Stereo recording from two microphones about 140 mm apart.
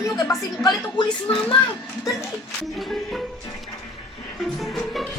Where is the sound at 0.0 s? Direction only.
25° left (ahead or behind).